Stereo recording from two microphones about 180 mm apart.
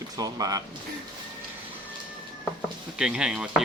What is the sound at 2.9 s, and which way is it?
Speech, 5° right (ahead or behind).